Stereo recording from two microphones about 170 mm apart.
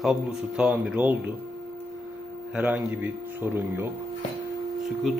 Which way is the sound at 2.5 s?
10° right (ahead or behind).